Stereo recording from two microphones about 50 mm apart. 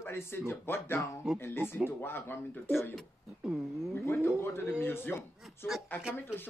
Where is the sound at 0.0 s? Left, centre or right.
Left.